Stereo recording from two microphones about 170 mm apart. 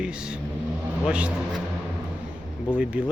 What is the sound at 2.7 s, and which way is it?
Speech, 10° right (ahead or behind).